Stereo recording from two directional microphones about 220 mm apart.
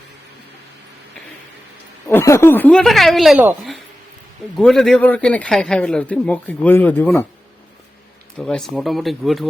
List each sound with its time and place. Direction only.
2.0 s a man's voice: 10° left (ahead or behind)
4.5 s a man's voice: centre (ahead or behind)
8.4 s a man's voice: 5° left (ahead or behind)